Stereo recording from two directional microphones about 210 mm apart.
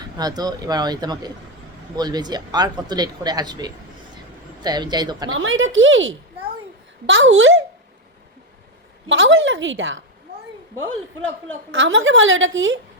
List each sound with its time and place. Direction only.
0.2 s speech: 20° right (ahead or behind)
5.3 s a woman's voice: 70° right (ahead or behind)
9.0 s a woman's voice: 65° right (ahead or behind)
11.2 s a woman's voice: 70° right (ahead or behind)